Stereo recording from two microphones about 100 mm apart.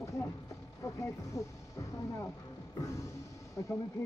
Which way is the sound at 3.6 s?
30° left (ahead or behind).